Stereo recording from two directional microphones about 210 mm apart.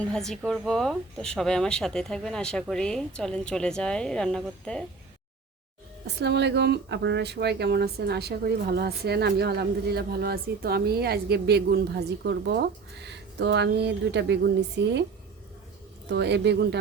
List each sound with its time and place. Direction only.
0.0 s a woman's voice: centre (ahead or behind)
6.1 s speech: 55° right (ahead or behind)
16.0 s speech: 55° right (ahead or behind)